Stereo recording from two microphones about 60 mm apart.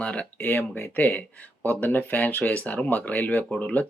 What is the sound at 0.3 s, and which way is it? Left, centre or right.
Speech, left.